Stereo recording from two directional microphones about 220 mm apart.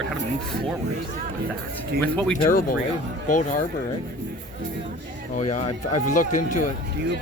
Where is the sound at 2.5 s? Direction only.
40° left (ahead or behind).